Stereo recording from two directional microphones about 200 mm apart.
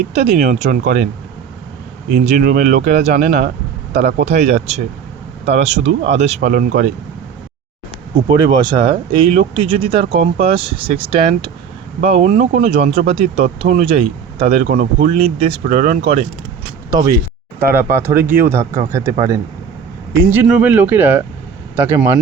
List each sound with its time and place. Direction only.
0.1 s speech: 30° right (ahead or behind)
2.1 s speech: 40° right (ahead or behind)
6.5 s speech: 45° right (ahead or behind)
8.1 s speech: 20° right (ahead or behind)
16.9 s speech: 20° right (ahead or behind)
20.1 s speech: 10° right (ahead or behind)